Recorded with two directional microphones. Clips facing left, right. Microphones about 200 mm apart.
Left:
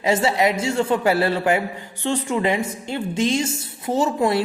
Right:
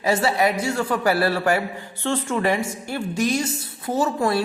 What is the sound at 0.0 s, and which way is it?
A man's voice, 20° left (ahead or behind).